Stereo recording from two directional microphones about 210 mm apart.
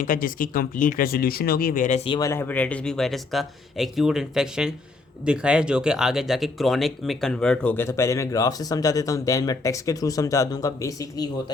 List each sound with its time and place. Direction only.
0.0 s speech: 40° left (ahead or behind)
2.0 s speech: 20° left (ahead or behind)